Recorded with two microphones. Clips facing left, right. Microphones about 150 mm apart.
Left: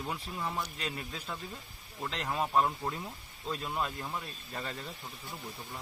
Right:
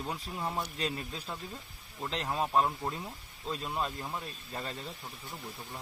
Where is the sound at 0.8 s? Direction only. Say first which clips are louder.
Right 3 dB; 30° right (ahead or behind).